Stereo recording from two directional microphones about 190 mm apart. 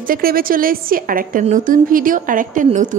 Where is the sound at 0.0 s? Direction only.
50° right (ahead or behind).